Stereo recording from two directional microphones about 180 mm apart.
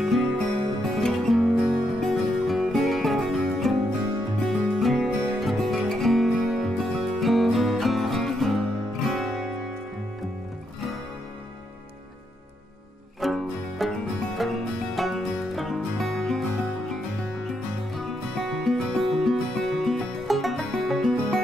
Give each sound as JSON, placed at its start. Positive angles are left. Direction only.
{"t": 0.0, "sound": "music", "side_deg": 0}
{"t": 13.2, "sound": "music", "side_deg": 0}
{"t": 17.9, "sound": "music", "side_deg": 0}